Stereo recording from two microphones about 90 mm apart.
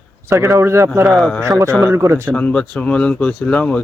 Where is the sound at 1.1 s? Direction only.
5° left (ahead or behind).